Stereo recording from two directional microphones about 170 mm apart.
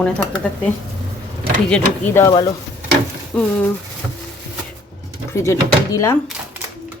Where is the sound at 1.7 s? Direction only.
15° left (ahead or behind).